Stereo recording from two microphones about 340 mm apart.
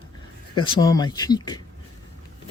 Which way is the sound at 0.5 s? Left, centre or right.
Centre.